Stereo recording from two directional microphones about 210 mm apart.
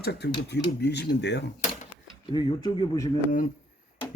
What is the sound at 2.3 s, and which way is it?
Speech, 20° left (ahead or behind).